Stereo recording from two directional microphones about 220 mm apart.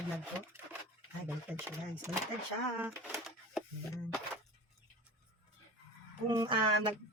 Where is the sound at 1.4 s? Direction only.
10° right (ahead or behind).